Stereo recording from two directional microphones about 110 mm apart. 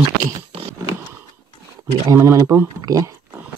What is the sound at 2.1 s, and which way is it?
Speech, 25° right (ahead or behind).